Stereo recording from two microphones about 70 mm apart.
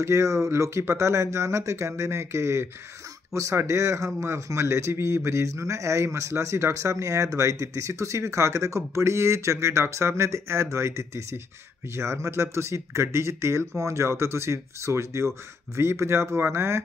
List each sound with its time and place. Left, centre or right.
0.0 s speech: right